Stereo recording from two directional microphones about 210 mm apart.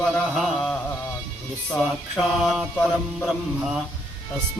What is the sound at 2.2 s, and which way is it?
Mantra, 5° right (ahead or behind).